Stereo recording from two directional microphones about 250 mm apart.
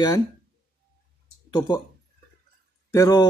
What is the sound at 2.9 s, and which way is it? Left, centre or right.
Speech, centre.